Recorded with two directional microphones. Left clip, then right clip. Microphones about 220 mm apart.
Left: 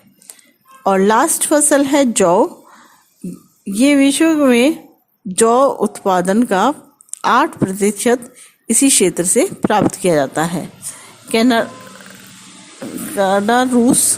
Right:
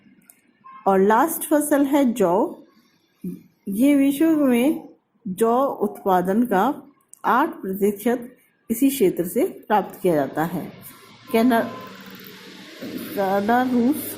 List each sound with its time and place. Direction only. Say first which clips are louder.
0.9 s a woman's voice: left 5 dB; 50° left (ahead or behind)
3.8 s a woman's voice: left 6 dB; 50° left (ahead or behind)
13.1 s a woman's voice: left 7 dB; 55° left (ahead or behind)